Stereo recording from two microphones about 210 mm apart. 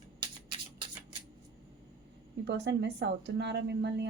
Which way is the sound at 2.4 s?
55° right (ahead or behind).